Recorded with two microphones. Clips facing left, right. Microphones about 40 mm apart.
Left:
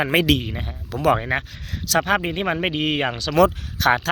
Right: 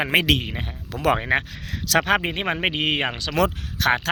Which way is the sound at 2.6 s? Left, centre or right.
Right.